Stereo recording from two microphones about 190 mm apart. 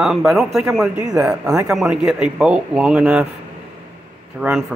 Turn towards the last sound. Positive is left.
turn(degrees=0)  # may be behind; listen again after turning